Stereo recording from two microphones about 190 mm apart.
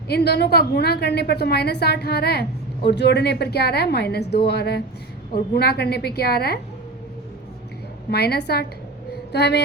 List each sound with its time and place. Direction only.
0.1 s a woman's voice: 60° left (ahead or behind)
8.1 s a woman's voice: 55° left (ahead or behind)